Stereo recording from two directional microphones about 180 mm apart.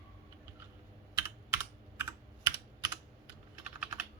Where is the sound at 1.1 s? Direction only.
15° right (ahead or behind).